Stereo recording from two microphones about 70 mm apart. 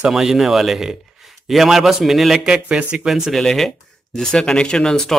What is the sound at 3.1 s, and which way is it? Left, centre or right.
Speech, centre.